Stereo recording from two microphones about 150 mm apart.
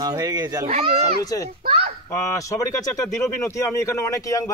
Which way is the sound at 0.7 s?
45° right (ahead or behind).